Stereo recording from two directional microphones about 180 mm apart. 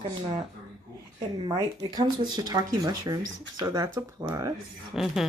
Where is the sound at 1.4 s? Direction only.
25° right (ahead or behind).